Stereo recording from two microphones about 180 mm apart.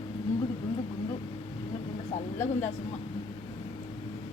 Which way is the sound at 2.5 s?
40° left (ahead or behind).